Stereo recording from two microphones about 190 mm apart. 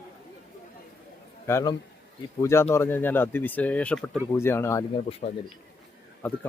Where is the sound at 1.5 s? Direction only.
15° left (ahead or behind).